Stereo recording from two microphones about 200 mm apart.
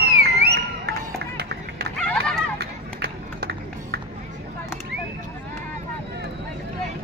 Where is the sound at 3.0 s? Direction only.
55° right (ahead or behind).